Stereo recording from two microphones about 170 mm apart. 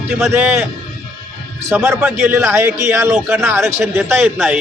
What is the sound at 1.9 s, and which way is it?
A man's voice, 5° right (ahead or behind).